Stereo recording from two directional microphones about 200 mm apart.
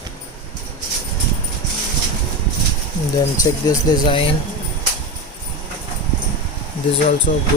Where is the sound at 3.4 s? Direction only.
20° left (ahead or behind).